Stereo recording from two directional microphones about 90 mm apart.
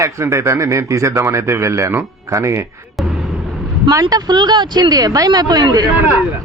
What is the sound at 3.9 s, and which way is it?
Speech, 45° right (ahead or behind).